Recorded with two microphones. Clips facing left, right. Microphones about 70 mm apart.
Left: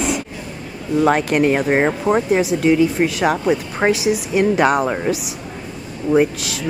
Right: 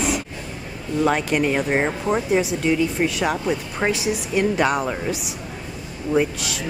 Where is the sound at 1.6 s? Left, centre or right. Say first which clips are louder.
Left 5 dB; left.